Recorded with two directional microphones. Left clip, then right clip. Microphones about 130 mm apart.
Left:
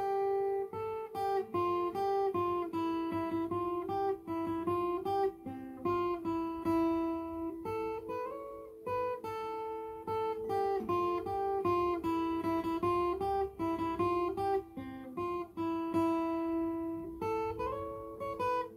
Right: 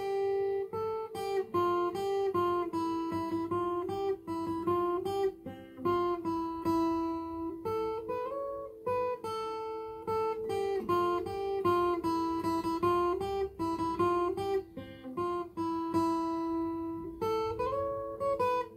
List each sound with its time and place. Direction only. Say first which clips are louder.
0.2 s guitar: right 1 dB; 20° right (ahead or behind)
15.9 s guitar: right 1 dB; 10° right (ahead or behind)